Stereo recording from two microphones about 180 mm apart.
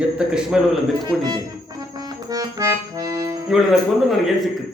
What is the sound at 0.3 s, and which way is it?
Speech, 5° right (ahead or behind).